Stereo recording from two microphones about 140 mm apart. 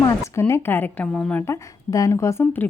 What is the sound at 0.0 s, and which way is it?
Speech, 20° left (ahead or behind).